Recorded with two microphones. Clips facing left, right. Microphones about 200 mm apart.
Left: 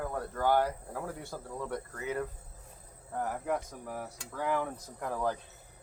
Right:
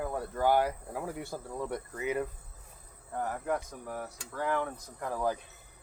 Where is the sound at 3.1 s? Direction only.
Centre (ahead or behind).